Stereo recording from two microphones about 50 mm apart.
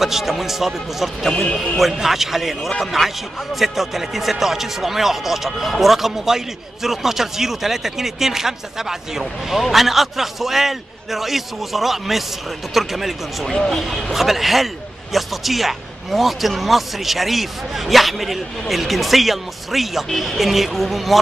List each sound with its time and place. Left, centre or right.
0.0 s speech: centre
1.3 s speech: left
1.6 s speech: centre